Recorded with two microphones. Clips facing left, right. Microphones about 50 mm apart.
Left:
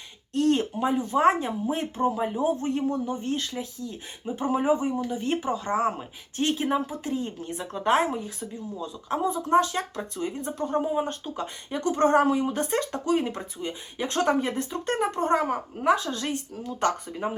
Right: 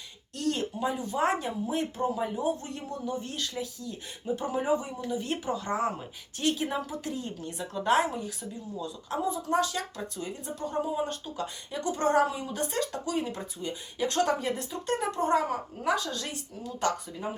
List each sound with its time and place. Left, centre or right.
0.3 s speech: left